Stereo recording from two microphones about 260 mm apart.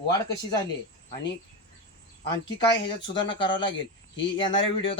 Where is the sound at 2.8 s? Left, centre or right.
Left.